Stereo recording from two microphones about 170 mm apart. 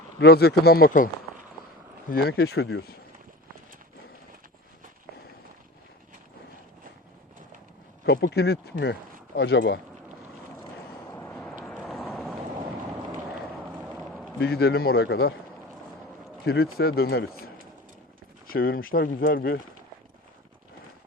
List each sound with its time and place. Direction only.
0.2 s speech: 70° left (ahead or behind); by 1.1 s 55° left (ahead or behind)
2.0 s speech: 65° left (ahead or behind)
8.0 s speech: 75° left (ahead or behind)
11.1 s vehicle: 15° left (ahead or behind)
14.3 s speech: 75° left (ahead or behind)
16.5 s speech: 65° left (ahead or behind)
18.4 s speech: 60° left (ahead or behind)